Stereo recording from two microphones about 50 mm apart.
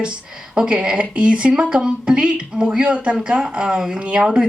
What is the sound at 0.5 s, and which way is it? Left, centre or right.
Speech, centre.